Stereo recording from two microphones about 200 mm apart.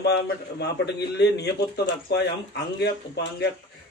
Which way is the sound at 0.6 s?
55° left (ahead or behind).